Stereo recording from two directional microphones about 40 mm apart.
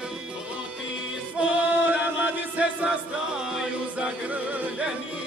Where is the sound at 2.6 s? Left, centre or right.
Right.